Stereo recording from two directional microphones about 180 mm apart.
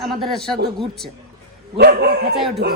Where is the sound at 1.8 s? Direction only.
65° right (ahead or behind).